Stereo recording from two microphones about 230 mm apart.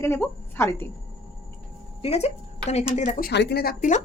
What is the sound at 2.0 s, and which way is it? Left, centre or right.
Speech, left.